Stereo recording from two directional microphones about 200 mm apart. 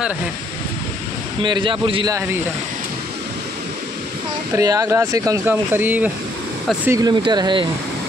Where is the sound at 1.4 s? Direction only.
25° right (ahead or behind).